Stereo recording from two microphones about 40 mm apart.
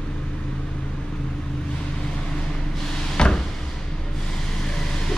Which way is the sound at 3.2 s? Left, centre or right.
Centre.